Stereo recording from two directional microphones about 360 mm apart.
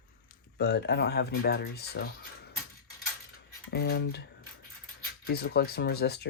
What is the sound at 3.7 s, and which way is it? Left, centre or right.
Speech, left.